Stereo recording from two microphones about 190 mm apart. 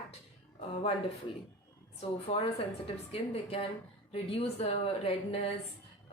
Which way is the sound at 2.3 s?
30° left (ahead or behind).